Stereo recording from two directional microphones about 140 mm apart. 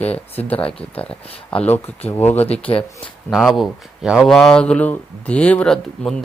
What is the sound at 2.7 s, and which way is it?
Speech, 35° left (ahead or behind).